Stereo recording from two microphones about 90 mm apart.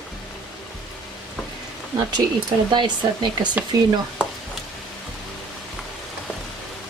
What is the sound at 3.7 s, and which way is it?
Speech, 50° right (ahead or behind).